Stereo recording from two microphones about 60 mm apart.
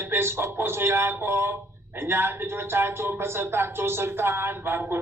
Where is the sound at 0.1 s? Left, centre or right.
Right.